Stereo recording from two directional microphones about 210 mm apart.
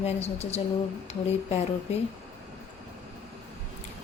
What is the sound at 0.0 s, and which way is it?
Speech, 30° left (ahead or behind).